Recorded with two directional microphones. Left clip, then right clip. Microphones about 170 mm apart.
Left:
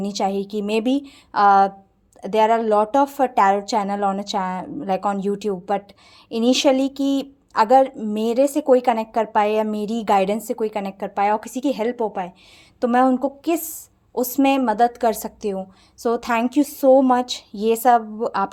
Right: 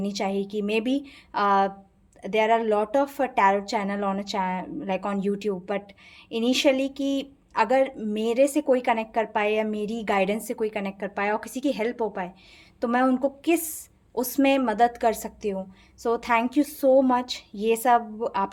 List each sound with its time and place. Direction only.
0.0 s a woman's voice: 35° left (ahead or behind)